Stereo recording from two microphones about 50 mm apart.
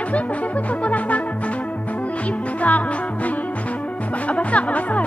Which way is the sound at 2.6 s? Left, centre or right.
Left.